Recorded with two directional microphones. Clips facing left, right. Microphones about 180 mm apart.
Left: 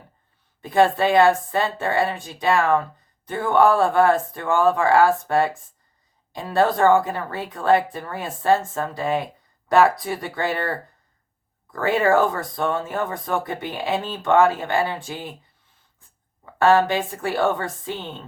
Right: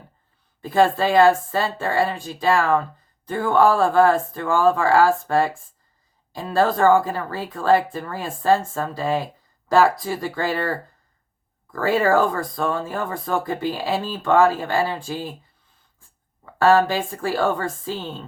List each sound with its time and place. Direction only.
0.6 s speech: 20° left (ahead or behind)
16.6 s speech: 20° left (ahead or behind)